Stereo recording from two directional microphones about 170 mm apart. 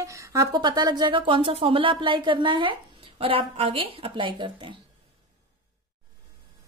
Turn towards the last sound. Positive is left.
turn(degrees=-30)  # may be behind; listen again after turning